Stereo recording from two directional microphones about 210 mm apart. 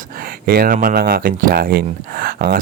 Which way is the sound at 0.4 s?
45° right (ahead or behind).